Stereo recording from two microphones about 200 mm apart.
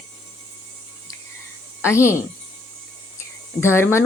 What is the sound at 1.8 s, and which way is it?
Speech, 15° left (ahead or behind).